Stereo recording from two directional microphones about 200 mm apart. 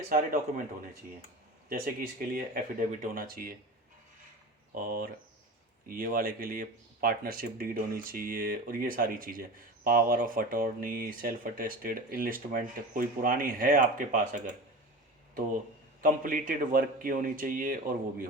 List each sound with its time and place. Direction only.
0.1 s speech: 45° right (ahead or behind)
1.7 s speech: 45° right (ahead or behind)
4.7 s speech: 45° right (ahead or behind)
16.0 s speech: 40° right (ahead or behind)